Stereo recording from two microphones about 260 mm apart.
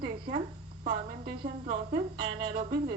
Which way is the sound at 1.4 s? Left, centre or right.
Right.